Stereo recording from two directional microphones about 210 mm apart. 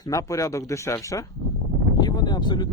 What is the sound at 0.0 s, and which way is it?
A man's voice, 15° left (ahead or behind).